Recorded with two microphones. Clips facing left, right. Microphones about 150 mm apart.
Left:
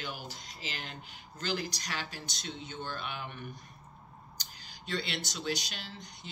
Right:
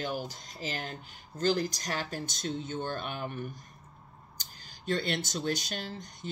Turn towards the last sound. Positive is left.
turn(degrees=-45)  # may be behind; listen again after turning